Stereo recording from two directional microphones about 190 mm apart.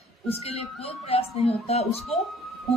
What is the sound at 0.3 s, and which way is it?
Speech, 30° left (ahead or behind).